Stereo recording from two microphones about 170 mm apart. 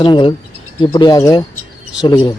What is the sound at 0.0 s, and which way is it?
Speech, 30° left (ahead or behind).